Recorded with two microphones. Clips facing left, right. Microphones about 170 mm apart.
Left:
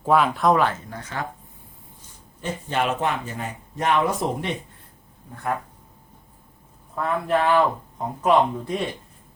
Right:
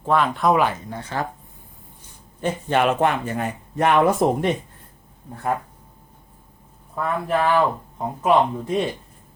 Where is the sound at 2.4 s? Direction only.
60° right (ahead or behind).